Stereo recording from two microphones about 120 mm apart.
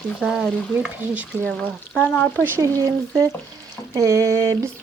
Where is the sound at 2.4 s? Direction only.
20° right (ahead or behind).